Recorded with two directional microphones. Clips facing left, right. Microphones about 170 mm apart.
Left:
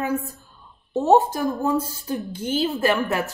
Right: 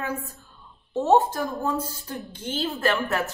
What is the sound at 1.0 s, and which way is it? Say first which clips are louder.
Speech: left 3 dB; 15° left (ahead or behind).